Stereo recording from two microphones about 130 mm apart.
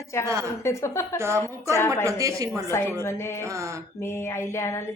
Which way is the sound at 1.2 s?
20° right (ahead or behind).